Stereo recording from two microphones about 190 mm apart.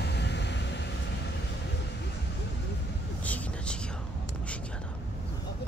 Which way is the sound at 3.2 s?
5° left (ahead or behind).